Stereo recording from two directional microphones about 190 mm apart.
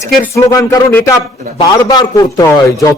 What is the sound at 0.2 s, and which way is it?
A man's voice, 15° left (ahead or behind).